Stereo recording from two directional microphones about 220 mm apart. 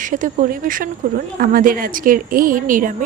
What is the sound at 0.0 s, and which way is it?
Speech, 35° right (ahead or behind).